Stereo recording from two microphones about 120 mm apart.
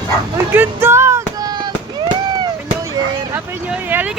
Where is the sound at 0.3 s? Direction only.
20° right (ahead or behind); by 1.7 s 35° right (ahead or behind).